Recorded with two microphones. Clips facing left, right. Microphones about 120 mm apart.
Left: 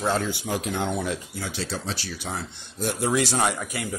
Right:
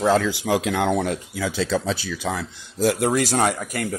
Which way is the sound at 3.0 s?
50° right (ahead or behind).